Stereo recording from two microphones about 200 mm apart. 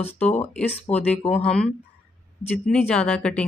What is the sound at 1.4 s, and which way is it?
Speech, 5° left (ahead or behind).